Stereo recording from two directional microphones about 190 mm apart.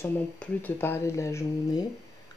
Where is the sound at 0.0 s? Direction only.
10° left (ahead or behind).